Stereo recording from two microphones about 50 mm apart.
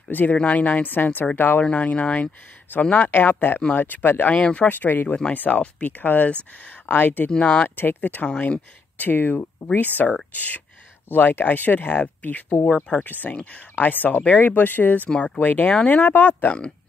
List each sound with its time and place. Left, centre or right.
0.1 s speech: left
1.6 s speech: left
4.4 s speech: left
4.6 s speech: left
6.9 s speech: left
7.2 s speech: left
7.6 s speech: left
15.0 s speech: centre
15.3 s speech: left
15.7 s speech: centre
16.0 s speech: left